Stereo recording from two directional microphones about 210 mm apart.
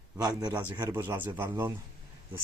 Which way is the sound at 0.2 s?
20° right (ahead or behind).